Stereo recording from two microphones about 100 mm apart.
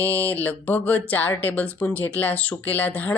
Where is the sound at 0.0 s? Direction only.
20° left (ahead or behind).